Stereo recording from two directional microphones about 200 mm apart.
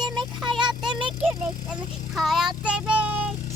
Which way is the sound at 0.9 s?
25° right (ahead or behind).